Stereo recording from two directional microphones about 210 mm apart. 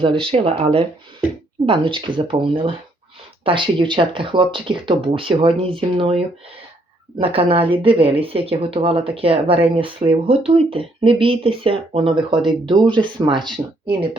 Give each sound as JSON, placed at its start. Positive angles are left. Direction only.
{"t": 0.0, "sound": "speech", "side_deg": -25}